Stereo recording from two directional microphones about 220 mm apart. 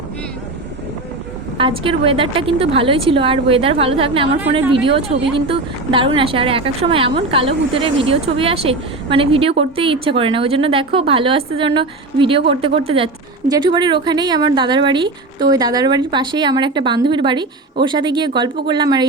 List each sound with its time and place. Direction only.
1.5 s speech: 25° right (ahead or behind)